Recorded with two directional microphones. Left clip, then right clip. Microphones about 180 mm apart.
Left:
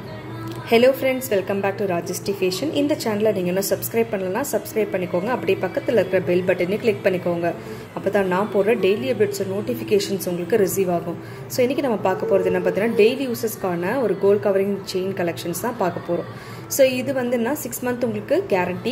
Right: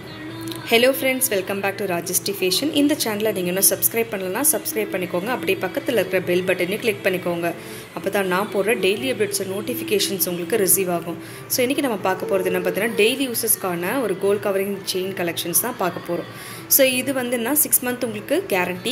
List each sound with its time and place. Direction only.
0.7 s a woman's voice: 5° left (ahead or behind)